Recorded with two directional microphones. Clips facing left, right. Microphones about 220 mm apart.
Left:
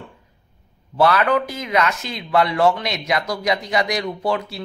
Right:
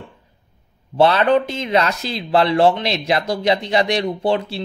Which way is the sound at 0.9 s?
25° right (ahead or behind).